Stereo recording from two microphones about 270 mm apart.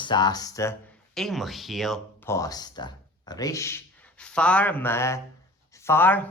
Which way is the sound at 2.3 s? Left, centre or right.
Centre.